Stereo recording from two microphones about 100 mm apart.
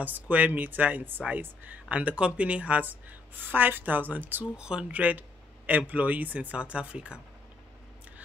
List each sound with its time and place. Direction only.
0.0 s speech: 15° right (ahead or behind)